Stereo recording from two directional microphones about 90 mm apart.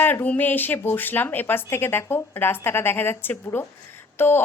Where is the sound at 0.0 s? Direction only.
20° left (ahead or behind).